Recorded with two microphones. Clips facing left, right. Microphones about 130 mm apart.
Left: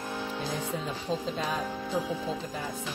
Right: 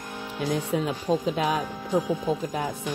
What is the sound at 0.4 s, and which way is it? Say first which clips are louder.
Speech: right 11 dB; 75° right (ahead or behind).